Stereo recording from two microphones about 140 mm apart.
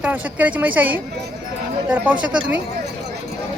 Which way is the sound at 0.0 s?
10° right (ahead or behind).